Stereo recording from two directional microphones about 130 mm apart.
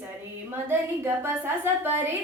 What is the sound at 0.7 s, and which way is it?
Female singing, 20° right (ahead or behind).